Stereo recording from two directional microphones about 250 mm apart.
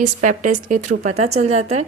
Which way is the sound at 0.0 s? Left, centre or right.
Right.